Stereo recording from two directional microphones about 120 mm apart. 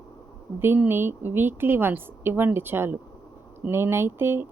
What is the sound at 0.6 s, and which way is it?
A woman's voice, 20° right (ahead or behind).